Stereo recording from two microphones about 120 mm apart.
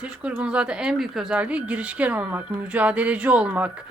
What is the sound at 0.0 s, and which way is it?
Speech, 10° right (ahead or behind).